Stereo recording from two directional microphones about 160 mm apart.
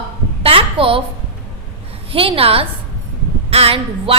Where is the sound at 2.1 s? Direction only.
35° right (ahead or behind).